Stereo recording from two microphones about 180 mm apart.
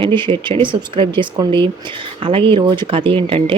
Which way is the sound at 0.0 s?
30° right (ahead or behind).